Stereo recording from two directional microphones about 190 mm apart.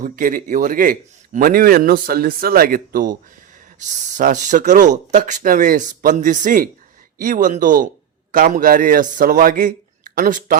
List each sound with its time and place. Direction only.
0.0 s a man's voice: 45° right (ahead or behind)